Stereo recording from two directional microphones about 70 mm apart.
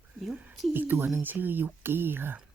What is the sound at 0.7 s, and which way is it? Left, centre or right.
Speech, right.